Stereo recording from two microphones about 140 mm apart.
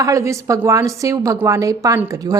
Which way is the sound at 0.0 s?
20° right (ahead or behind).